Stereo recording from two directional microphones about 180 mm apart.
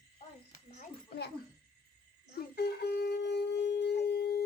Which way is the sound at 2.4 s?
65° left (ahead or behind).